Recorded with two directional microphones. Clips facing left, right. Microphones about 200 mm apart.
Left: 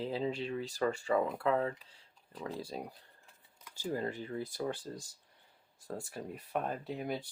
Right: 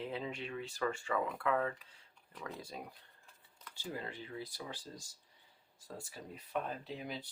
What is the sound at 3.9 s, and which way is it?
Speech, 45° left (ahead or behind).